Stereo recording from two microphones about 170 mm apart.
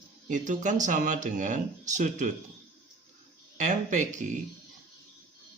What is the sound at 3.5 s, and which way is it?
Speech, 45° right (ahead or behind).